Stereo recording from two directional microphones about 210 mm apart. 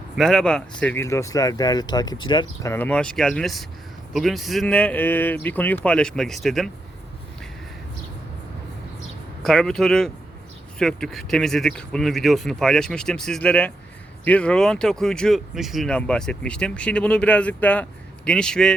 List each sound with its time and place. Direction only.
0.2 s speech: centre (ahead or behind); by 2.7 s 20° left (ahead or behind)
2.7 s speech: 5° left (ahead or behind)
9.4 s speech: 5° left (ahead or behind)